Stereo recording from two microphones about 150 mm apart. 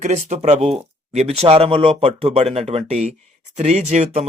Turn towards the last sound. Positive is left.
turn(degrees=-50)  # may be behind; listen again after turning